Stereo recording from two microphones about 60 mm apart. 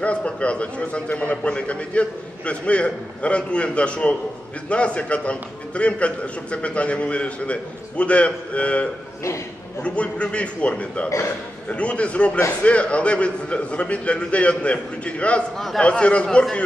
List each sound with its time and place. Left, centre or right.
0.0 s a man's voice: left
9.8 s a man's voice: centre
15.5 s a man's voice: centre
15.8 s a man's voice: centre